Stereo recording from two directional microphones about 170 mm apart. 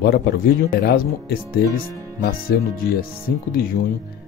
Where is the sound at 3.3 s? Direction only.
70° left (ahead or behind).